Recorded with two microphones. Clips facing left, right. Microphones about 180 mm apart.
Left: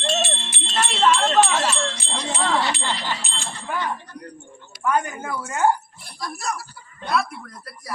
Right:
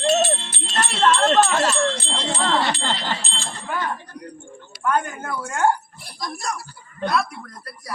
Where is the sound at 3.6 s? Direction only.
Centre (ahead or behind).